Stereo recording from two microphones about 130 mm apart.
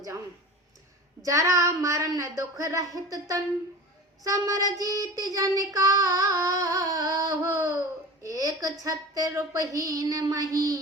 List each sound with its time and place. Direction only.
1.2 s child singing: 25° right (ahead or behind)